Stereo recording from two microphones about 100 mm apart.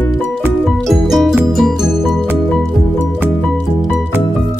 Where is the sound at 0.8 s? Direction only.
Centre (ahead or behind).